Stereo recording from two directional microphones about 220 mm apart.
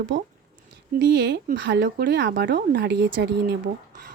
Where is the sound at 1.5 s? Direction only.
50° right (ahead or behind).